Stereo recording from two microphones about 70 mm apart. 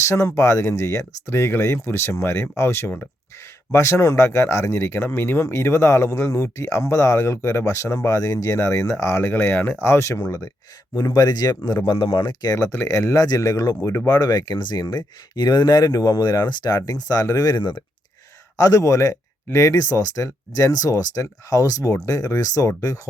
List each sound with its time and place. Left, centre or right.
0.0 s speech: left
10.2 s speech: left
11.9 s speech: left
12.7 s speech: left
13.1 s speech: left
13.8 s speech: left
14.1 s speech: left
18.5 s speech: left